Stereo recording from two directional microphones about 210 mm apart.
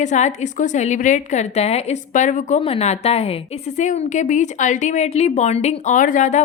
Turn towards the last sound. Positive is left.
turn(degrees=35)  # may be behind; listen again after turning